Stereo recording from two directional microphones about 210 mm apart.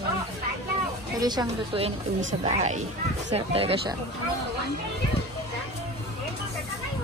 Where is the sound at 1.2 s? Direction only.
20° right (ahead or behind).